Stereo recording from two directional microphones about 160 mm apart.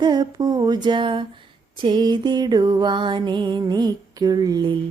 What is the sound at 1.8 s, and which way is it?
Music, 30° right (ahead or behind).